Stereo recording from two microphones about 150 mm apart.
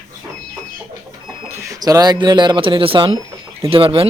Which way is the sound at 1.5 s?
20° right (ahead or behind).